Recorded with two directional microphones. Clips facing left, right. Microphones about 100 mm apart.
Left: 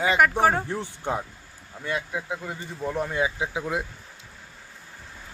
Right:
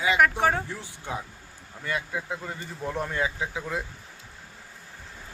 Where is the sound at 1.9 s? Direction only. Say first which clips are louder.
Left 1 dB; 15° left (ahead or behind).